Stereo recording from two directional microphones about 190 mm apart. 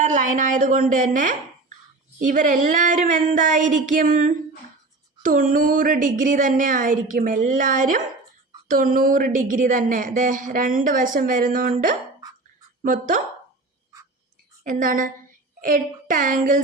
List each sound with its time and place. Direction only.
0.0 s a woman's voice: 40° right (ahead or behind)
12.8 s a woman's voice: 45° right (ahead or behind)
14.6 s a woman's voice: 45° right (ahead or behind)